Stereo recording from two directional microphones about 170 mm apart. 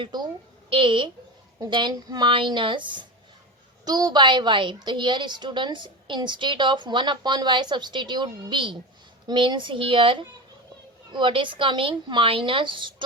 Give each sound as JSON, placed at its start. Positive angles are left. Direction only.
{"t": 0.0, "sound": "a woman's voice", "side_deg": -25}